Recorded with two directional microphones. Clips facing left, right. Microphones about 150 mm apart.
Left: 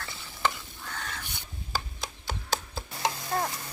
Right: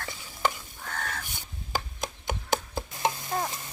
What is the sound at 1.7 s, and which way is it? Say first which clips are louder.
Chopping: right 3 dB; 20° right (ahead or behind).